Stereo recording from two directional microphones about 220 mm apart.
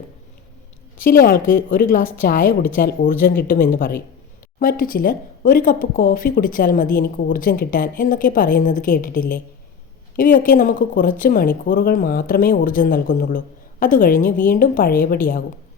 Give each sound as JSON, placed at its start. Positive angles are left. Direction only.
{"t": 0.9, "sound": "a woman's voice", "side_deg": 40}